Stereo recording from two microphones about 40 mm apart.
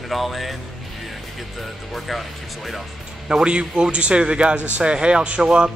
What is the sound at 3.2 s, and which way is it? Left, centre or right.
Speech, right.